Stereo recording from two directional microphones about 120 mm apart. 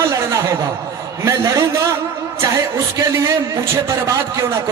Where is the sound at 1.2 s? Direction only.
25° right (ahead or behind).